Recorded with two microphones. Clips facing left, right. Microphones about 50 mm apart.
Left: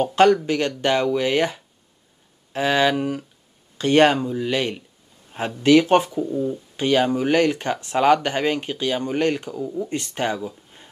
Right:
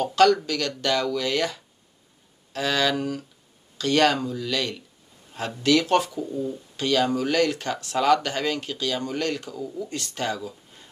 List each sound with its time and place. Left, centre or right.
0.0 s speech: left